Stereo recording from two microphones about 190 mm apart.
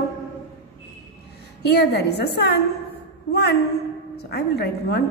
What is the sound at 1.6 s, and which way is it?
Speech, 60° left (ahead or behind).